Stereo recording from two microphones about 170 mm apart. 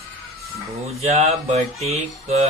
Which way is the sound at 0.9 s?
40° right (ahead or behind).